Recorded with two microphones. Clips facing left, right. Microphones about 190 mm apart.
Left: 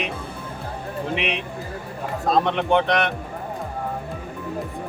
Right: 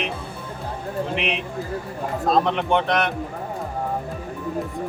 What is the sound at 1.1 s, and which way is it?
Speech, centre (ahead or behind).